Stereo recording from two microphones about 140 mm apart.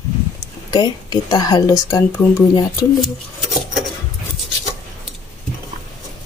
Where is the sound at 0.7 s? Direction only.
30° left (ahead or behind).